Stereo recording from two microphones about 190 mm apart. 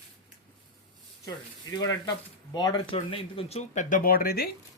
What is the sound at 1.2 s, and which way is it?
Speech, 20° left (ahead or behind).